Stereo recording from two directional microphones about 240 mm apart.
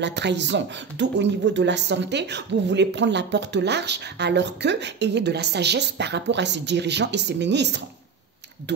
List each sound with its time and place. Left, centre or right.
0.0 s speech: right